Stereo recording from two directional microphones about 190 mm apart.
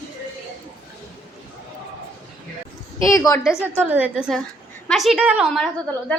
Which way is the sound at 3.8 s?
10° right (ahead or behind).